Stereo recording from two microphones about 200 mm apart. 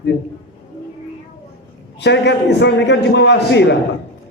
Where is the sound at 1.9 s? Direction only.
60° left (ahead or behind).